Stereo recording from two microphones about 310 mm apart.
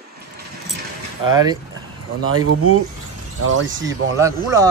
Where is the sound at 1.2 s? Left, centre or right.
Centre.